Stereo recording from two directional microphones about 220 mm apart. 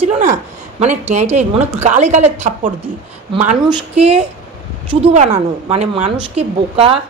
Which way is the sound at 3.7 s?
25° right (ahead or behind).